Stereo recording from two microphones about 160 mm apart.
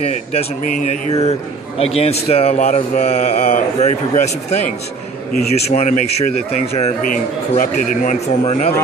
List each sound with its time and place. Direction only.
0.0 s a man's voice: 40° left (ahead or behind)
7.5 s a man's voice: 55° left (ahead or behind)